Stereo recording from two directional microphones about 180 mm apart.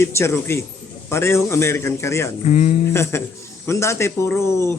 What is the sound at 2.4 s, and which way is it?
Speech, 40° left (ahead or behind).